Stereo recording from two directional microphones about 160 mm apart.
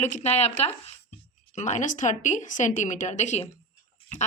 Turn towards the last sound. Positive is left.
turn(degrees=45)  # may be behind; listen again after turning